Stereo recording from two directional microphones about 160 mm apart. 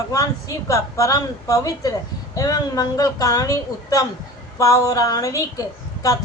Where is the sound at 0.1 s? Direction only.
20° left (ahead or behind).